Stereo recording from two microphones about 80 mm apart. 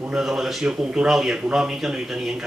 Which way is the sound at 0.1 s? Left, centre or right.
Centre.